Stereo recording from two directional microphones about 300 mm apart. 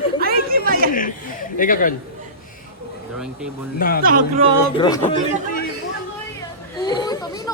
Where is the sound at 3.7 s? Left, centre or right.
Left.